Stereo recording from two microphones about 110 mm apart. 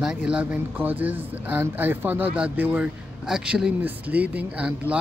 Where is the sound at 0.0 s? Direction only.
5° right (ahead or behind).